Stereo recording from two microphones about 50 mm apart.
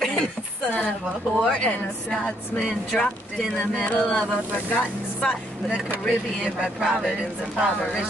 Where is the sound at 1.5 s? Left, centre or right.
Left.